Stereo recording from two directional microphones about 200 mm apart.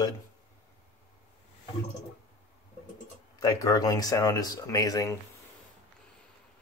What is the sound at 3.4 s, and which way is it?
Speech, 15° left (ahead or behind).